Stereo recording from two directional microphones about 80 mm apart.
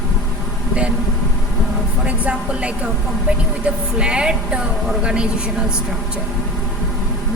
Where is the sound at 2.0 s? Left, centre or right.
Centre.